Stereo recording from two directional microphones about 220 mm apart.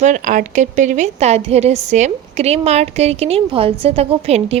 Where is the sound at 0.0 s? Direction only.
35° right (ahead or behind).